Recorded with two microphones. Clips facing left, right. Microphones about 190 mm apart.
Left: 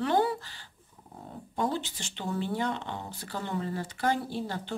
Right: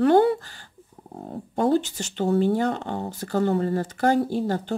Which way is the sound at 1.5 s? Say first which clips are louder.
Right 9 dB; 45° right (ahead or behind).